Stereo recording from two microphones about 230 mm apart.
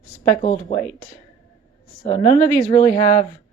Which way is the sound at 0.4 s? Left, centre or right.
Left.